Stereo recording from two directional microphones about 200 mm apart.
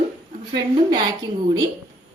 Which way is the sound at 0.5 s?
20° right (ahead or behind).